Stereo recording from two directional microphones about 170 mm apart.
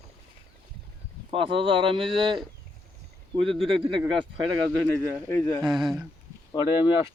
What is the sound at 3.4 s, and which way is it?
Speech, 30° right (ahead or behind).